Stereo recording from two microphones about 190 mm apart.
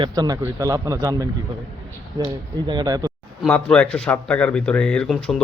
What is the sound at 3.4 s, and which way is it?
Speech, 5° left (ahead or behind).